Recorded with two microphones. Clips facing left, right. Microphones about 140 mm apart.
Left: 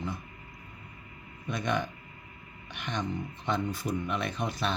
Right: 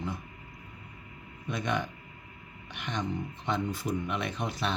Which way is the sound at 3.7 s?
20° right (ahead or behind).